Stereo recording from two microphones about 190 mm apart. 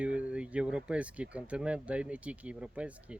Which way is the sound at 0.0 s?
5° right (ahead or behind).